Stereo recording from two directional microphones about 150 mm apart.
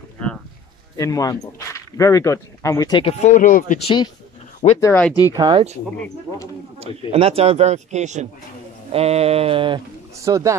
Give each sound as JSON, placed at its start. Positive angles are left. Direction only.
{"t": 0.2, "sound": "a sound", "side_deg": 10}
{"t": 0.9, "sound": "speech", "side_deg": 20}
{"t": 3.0, "sound": "speech", "side_deg": 45}
{"t": 3.8, "sound": "speech", "side_deg": 30}
{"t": 4.6, "sound": "speech", "side_deg": 45}
{"t": 5.3, "sound": "speech", "side_deg": -30}
{"t": 6.8, "sound": "a man's voice", "side_deg": -40}
{"t": 8.9, "sound": "a sound", "side_deg": -45}
{"t": 10.1, "sound": "speech", "side_deg": -20}